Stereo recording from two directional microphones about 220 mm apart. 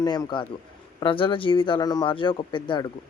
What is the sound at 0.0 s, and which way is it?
Speech, 20° left (ahead or behind).